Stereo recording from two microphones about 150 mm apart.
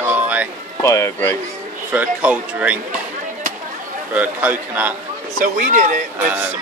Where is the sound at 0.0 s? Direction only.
10° right (ahead or behind).